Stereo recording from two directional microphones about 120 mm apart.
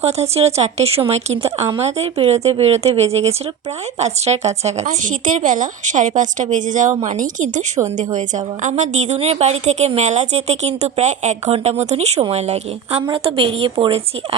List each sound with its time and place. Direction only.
0.0 s a woman's voice: 60° right (ahead or behind); by 7.6 s 90° right
8.6 s a woman's voice: 80° right; by 13.0 s 60° right (ahead or behind)
13.0 s a woman's voice: 45° right (ahead or behind)